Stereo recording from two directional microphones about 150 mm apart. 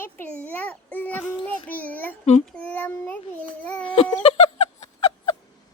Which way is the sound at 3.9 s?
40° left (ahead or behind).